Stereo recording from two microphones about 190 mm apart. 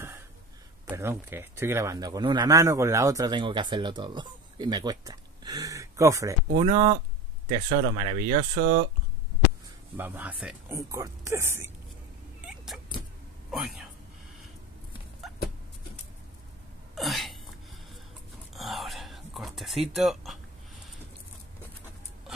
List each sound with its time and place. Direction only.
0.9 s speech: 10° right (ahead or behind); by 8.8 s 30° right (ahead or behind)
9.9 s speech: 10° right (ahead or behind)
12.4 s power windows: 5° right (ahead or behind)
13.5 s speech: centre (ahead or behind)
15.2 s dog: centre (ahead or behind)
16.9 s a sound: centre (ahead or behind)
18.5 s whispering: centre (ahead or behind)